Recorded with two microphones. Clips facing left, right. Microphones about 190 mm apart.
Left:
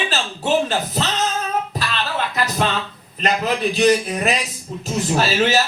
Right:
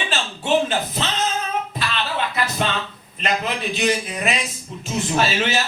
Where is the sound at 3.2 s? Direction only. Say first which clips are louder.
Left 4 dB; 40° left (ahead or behind).